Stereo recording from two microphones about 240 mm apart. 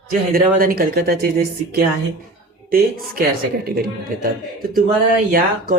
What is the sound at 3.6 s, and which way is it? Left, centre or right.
Speech, right.